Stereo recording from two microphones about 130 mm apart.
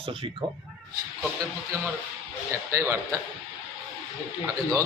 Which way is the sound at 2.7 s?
20° right (ahead or behind).